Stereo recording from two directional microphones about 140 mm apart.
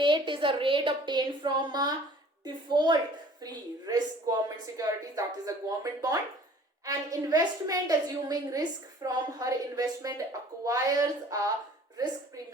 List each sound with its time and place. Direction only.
0.0 s a woman's voice: 35° right (ahead or behind)